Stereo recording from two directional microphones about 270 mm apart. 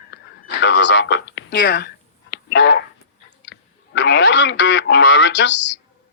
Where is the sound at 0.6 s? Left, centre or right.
Left.